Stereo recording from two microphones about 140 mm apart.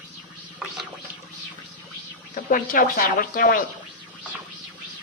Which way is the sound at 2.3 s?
85° left.